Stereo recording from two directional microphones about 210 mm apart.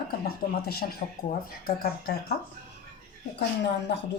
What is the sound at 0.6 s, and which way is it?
Speech, 50° left (ahead or behind).